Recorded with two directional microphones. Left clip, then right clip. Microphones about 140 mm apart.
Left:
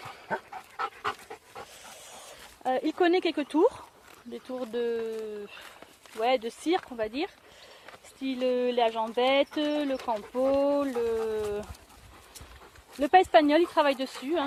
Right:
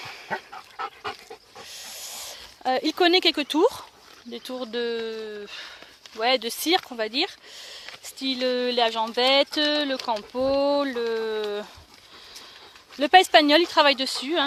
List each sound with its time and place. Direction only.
0.3 s dog: 10° right (ahead or behind)
2.6 s speech: 25° right (ahead or behind)
6.7 s speech: 25° right (ahead or behind)
13.0 s speech: 20° right (ahead or behind)